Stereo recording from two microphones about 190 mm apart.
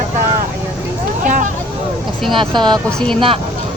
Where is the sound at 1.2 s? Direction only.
45° right (ahead or behind).